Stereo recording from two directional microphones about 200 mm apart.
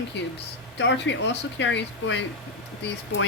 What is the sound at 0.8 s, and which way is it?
A woman's voice, 60° left (ahead or behind).